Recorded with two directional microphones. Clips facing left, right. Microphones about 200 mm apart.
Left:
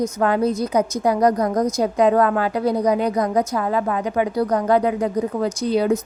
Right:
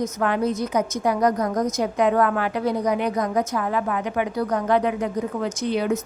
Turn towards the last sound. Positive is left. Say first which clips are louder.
# left 4 dB
turn(degrees=35)  # may be behind; listen again after turning